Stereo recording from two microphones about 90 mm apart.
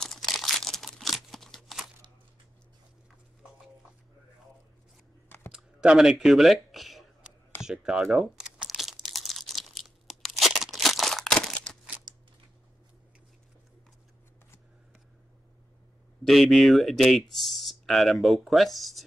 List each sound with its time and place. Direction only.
0.0 s crumpling: 5° left (ahead or behind)
5.5 s a sound: 5° right (ahead or behind)
7.6 s speech: 10° right (ahead or behind)
8.6 s crunch: 5° right (ahead or behind)
16.3 s speech: centre (ahead or behind)